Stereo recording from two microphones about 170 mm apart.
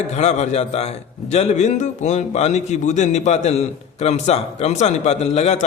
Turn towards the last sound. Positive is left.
turn(degrees=40)  # may be behind; listen again after turning